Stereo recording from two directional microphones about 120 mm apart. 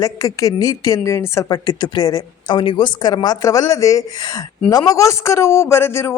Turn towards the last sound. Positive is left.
turn(degrees=20)  # may be behind; listen again after turning